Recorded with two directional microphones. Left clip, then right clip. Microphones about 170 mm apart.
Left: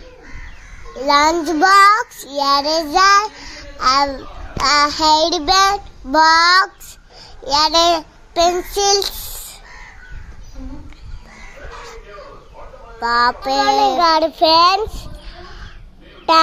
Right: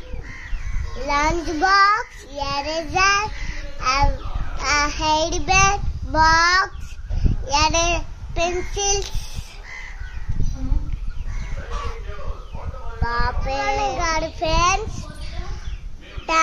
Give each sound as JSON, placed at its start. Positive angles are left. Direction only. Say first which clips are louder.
{"t": 1.0, "sound": "child singing", "louder": "left 7 dB", "side_deg": 30}
{"t": 7.5, "sound": "a child's voice", "louder": "left 6 dB", "side_deg": 5}
{"t": 8.7, "sound": "child singing", "louder": "left 8 dB", "side_deg": 30}
{"t": 13.0, "sound": "child singing", "louder": "left 9 dB", "side_deg": 30}